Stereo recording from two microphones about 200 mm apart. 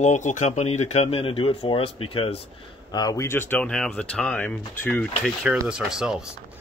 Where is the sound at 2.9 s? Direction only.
15° left (ahead or behind); by 6.4 s 5° right (ahead or behind).